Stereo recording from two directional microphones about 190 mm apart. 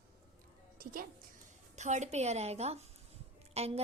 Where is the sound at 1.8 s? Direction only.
40° right (ahead or behind).